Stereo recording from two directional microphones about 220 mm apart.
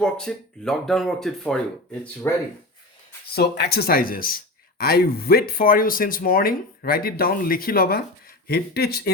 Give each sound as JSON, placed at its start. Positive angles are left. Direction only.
{"t": 0.0, "sound": "speech", "side_deg": 5}
{"t": 3.3, "sound": "speech", "side_deg": 45}